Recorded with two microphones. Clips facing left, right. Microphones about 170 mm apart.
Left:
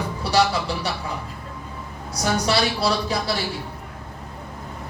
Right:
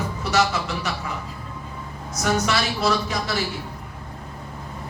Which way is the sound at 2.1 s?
35° left (ahead or behind).